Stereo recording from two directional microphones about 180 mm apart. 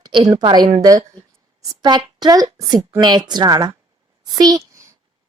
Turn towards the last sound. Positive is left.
turn(degrees=-15)  # may be behind; listen again after turning